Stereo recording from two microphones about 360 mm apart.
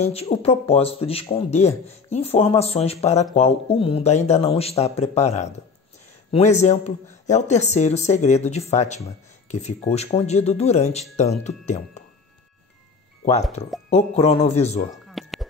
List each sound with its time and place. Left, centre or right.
0.0 s speech: centre
13.8 s speech: centre
15.0 s music: centre